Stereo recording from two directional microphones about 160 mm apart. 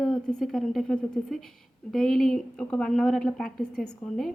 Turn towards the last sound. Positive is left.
turn(degrees=5)  # may be behind; listen again after turning